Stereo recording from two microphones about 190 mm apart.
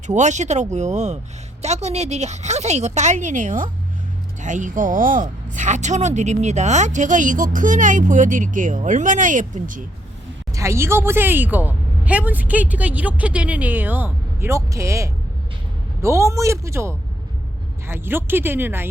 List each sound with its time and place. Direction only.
0.1 s speech: 40° right (ahead or behind)
10.5 s speech: 15° right (ahead or behind)